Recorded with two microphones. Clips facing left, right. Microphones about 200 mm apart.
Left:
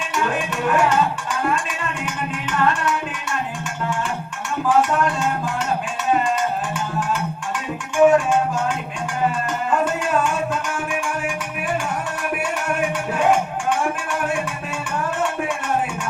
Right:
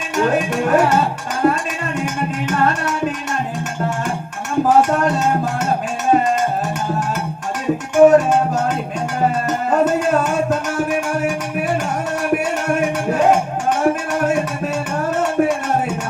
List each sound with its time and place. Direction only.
0.1 s music: 40° right (ahead or behind)
4.6 s cowbell: 45° right (ahead or behind)
7.9 s music: 40° right (ahead or behind)
12.3 s a sound: 40° right (ahead or behind)